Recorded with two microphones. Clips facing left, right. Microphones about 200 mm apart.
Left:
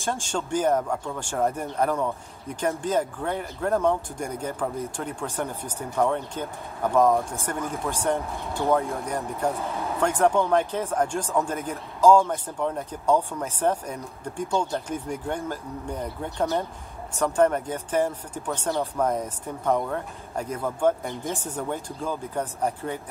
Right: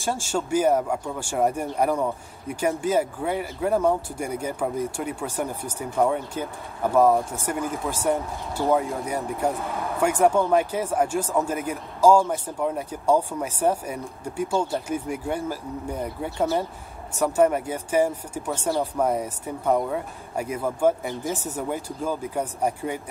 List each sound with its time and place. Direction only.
0.0 s speech: 10° right (ahead or behind)
9.6 s speech: 30° left (ahead or behind)
9.9 s speech: 10° right (ahead or behind)